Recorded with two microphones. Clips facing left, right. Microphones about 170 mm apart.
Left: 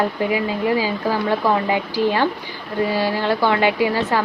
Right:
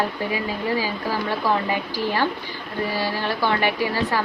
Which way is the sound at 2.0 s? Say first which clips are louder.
Left 5 dB; 20° left (ahead or behind).